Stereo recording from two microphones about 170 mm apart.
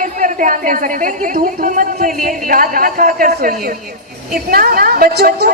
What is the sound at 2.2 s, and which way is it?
A woman's voice, 55° right (ahead or behind).